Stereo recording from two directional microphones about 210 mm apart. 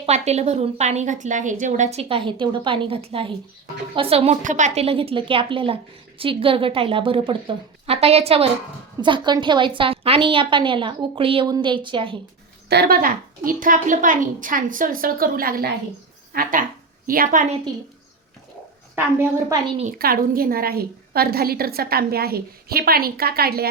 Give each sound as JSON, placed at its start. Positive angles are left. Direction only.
{"t": 0.0, "sound": "a woman's voice", "side_deg": -30}
{"t": 12.6, "sound": "a woman's voice", "side_deg": -50}
{"t": 18.9, "sound": "a woman's voice", "side_deg": -10}
{"t": 19.6, "sound": "a woman's voice", "side_deg": -25}
{"t": 19.9, "sound": "a woman's voice", "side_deg": -45}